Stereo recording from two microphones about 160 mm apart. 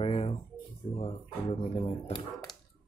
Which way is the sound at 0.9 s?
35° left (ahead or behind).